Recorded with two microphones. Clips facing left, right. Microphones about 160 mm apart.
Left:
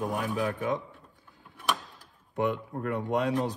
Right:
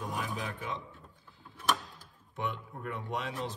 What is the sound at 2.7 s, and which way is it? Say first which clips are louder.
Speech: left 8 dB; 45° left (ahead or behind).